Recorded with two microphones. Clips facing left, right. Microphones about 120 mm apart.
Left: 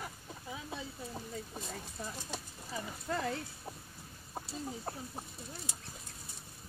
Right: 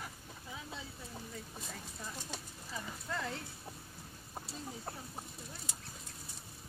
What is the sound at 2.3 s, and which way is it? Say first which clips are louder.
Clip-clop: left 3 dB; 10° left (ahead or behind).